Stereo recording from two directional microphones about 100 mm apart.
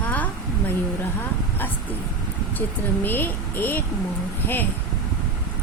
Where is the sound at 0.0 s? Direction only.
15° left (ahead or behind).